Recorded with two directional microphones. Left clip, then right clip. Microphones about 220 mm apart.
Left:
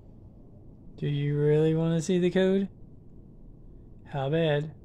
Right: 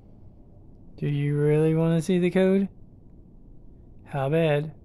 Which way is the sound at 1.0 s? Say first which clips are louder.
Right 2 dB; 20° right (ahead or behind).